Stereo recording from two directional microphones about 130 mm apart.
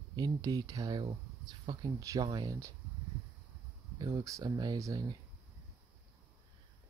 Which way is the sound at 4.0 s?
25° right (ahead or behind).